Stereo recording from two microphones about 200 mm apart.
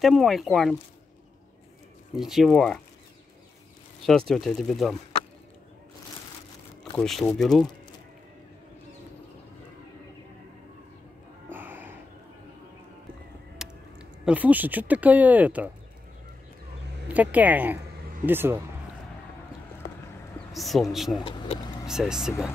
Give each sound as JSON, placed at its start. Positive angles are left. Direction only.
{"t": 0.0, "sound": "speech", "side_deg": 0}
{"t": 2.1, "sound": "speech", "side_deg": 0}
{"t": 4.3, "sound": "speech", "side_deg": 0}
{"t": 7.0, "sound": "speech", "side_deg": 0}
{"t": 11.4, "sound": "music", "side_deg": -10}
{"t": 13.6, "sound": "speech", "side_deg": -5}
{"t": 17.1, "sound": "speech", "side_deg": -10}
{"t": 19.8, "sound": "clip-clop", "side_deg": 60}
{"t": 20.5, "sound": "speech", "side_deg": 0}